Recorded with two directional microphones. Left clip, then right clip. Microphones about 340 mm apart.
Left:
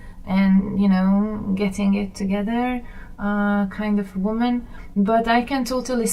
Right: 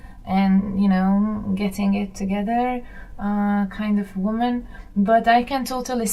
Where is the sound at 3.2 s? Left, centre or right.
Centre.